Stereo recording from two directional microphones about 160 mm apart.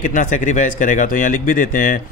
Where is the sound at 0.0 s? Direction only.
55° left (ahead or behind).